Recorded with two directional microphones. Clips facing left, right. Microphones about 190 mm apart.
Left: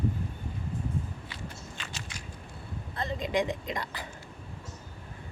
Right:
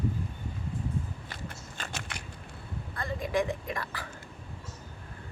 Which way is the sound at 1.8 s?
55° right (ahead or behind).